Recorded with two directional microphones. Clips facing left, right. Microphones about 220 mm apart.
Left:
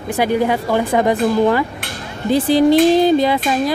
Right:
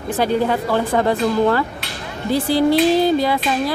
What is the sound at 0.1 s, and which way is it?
Speech, 15° left (ahead or behind).